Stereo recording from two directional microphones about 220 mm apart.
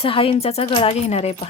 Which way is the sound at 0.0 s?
25° left (ahead or behind).